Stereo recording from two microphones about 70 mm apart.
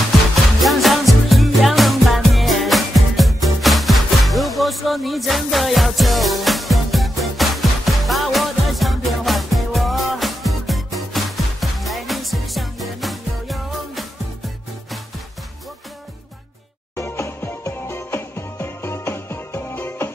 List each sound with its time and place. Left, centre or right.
0.6 s music: centre
16.9 s music: left
19.7 s music: left